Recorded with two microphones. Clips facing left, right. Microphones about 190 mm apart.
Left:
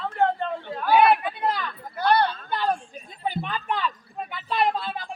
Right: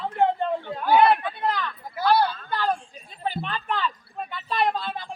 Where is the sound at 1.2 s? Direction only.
10° left (ahead or behind).